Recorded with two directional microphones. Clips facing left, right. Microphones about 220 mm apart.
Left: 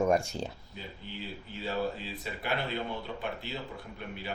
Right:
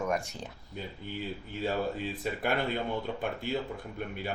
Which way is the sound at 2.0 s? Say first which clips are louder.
Right 6 dB; 50° right (ahead or behind).